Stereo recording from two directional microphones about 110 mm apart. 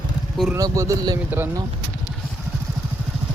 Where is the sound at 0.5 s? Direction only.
30° right (ahead or behind).